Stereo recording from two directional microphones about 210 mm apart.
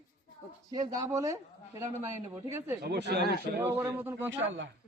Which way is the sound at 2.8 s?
50° right (ahead or behind).